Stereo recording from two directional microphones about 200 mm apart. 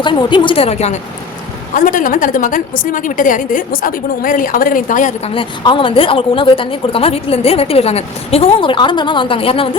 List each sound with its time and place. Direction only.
0.0 s a woman's voice: 25° left (ahead or behind); by 5.3 s 40° left (ahead or behind)
5.3 s a woman's voice: 25° left (ahead or behind)